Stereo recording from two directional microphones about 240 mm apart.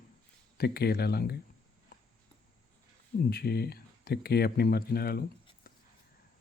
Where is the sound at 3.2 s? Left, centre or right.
Left.